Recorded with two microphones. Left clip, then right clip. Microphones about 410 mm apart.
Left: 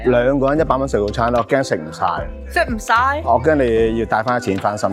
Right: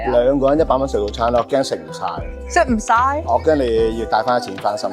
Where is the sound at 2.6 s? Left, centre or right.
Right.